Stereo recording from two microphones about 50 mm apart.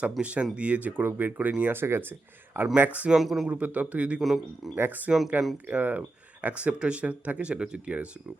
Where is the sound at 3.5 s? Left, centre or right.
Right.